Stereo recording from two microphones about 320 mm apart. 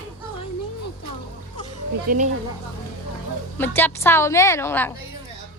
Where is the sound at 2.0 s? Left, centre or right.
Right.